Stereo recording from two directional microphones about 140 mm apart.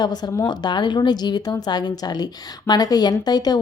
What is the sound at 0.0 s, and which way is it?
A woman's voice, 30° left (ahead or behind).